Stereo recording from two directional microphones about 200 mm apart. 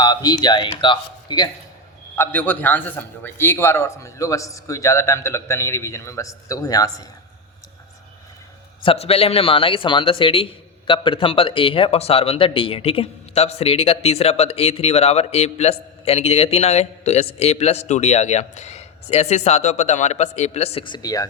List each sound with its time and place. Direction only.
0.0 s speech: 20° left (ahead or behind)
2.1 s a man's voice: 10° left (ahead or behind)
8.8 s speech: 30° left (ahead or behind)